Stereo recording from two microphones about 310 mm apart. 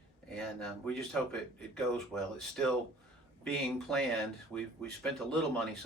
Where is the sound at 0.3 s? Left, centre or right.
Centre.